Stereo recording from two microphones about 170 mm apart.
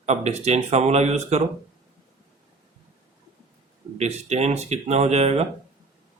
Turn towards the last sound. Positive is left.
turn(degrees=-40)  # may be behind; listen again after turning